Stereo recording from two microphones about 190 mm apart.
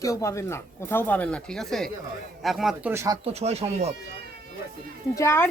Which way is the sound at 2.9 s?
15° right (ahead or behind).